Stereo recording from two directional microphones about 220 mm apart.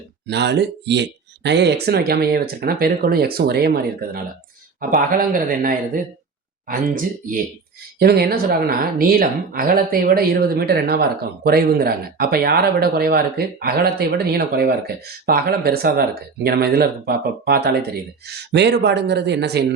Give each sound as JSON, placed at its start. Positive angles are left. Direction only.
{"t": 0.3, "sound": "speech", "side_deg": -50}
{"t": 4.8, "sound": "speech", "side_deg": -40}